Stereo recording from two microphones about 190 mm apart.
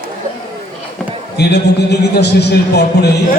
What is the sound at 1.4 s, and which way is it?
Speech, 60° left (ahead or behind).